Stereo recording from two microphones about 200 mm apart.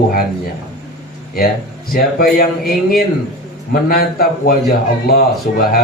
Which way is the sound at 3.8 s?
50° left (ahead or behind).